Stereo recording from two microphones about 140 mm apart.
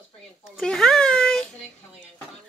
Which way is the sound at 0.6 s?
5° left (ahead or behind).